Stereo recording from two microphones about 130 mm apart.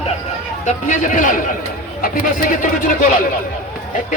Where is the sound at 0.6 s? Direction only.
75° left (ahead or behind).